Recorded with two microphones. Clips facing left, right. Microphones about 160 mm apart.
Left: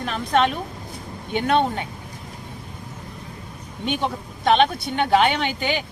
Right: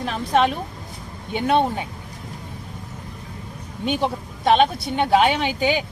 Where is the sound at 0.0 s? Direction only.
5° right (ahead or behind).